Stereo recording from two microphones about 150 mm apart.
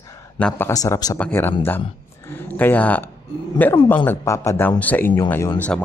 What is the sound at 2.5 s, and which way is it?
Speech, 10° left (ahead or behind).